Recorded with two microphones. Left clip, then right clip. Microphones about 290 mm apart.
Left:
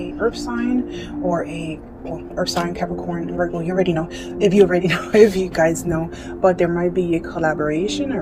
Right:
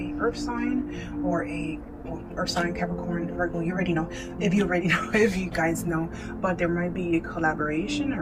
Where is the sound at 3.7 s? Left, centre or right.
Left.